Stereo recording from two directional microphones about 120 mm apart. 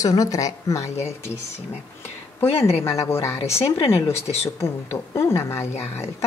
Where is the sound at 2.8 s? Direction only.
25° left (ahead or behind).